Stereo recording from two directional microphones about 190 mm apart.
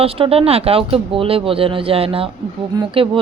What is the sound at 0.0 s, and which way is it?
Speech, 30° right (ahead or behind).